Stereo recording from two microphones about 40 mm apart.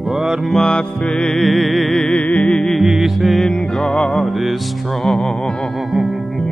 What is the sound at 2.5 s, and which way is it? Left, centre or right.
Music, centre.